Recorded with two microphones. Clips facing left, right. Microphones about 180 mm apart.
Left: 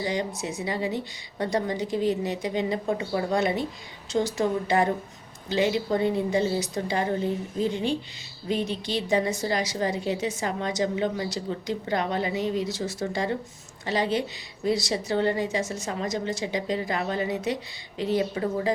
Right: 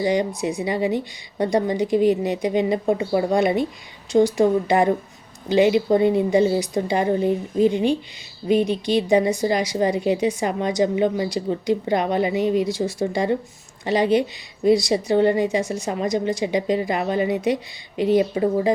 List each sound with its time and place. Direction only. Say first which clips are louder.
0.0 s a woman's voice: right 8 dB; 15° right (ahead or behind)